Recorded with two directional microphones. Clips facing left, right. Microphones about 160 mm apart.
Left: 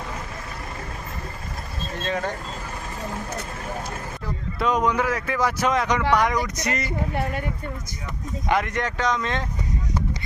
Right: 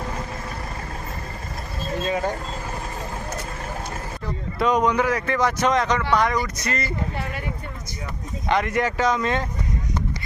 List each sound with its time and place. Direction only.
2.0 s speech: 10° right (ahead or behind)
4.6 s speech: centre (ahead or behind); by 6.9 s 15° left (ahead or behind)
7.2 s speech: 50° left (ahead or behind)
8.4 s speech: 5° left (ahead or behind)